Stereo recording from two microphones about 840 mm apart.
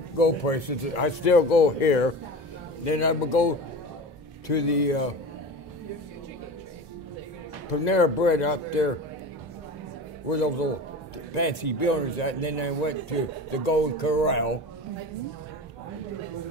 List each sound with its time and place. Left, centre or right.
0.2 s speech: left
7.8 s speech: left
10.3 s speech: left